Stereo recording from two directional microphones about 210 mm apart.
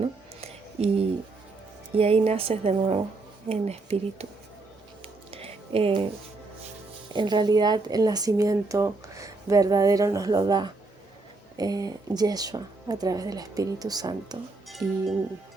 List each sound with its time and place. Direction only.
0.0 s a sound: 30° right (ahead or behind)
2.0 s speech: 30° right (ahead or behind)
5.0 s music: 25° right (ahead or behind)
7.1 s speech: 20° right (ahead or behind)